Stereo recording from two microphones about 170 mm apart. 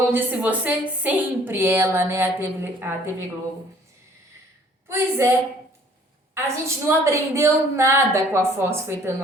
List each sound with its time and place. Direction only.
0.1 s a woman's voice: 10° right (ahead or behind)
4.9 s a woman's voice: 15° right (ahead or behind)
6.3 s a woman's voice: 15° right (ahead or behind)